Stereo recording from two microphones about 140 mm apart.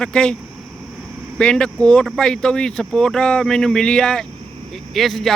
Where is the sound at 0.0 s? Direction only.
5° left (ahead or behind).